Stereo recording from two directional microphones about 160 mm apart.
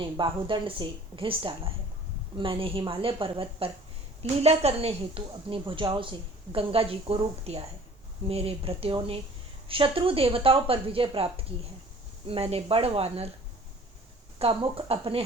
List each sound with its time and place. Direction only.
0.0 s a woman's voice: 30° right (ahead or behind)
12.3 s a woman's voice: 40° right (ahead or behind)
14.3 s a woman's voice: 35° right (ahead or behind)